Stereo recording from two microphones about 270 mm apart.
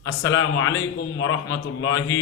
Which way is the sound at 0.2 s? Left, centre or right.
Centre.